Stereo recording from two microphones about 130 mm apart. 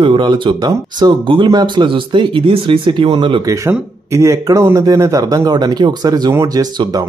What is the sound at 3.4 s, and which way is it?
Speech, 20° right (ahead or behind).